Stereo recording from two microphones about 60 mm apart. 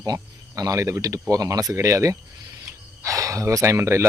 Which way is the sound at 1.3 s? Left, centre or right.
Right.